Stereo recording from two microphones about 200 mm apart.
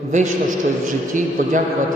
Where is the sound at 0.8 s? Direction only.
40° right (ahead or behind).